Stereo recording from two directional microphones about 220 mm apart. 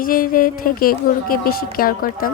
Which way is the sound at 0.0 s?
40° left (ahead or behind).